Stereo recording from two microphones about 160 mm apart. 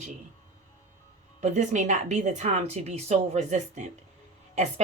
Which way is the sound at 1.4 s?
50° right (ahead or behind).